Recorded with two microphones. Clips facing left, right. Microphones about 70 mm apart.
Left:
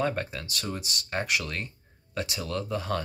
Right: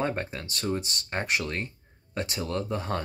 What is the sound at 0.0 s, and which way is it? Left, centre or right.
Speech, right.